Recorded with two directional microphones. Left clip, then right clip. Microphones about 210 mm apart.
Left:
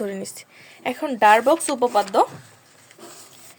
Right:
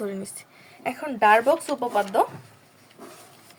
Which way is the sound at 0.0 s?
30° left (ahead or behind).